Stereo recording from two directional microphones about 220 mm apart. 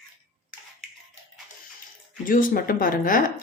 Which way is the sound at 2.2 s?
40° left (ahead or behind).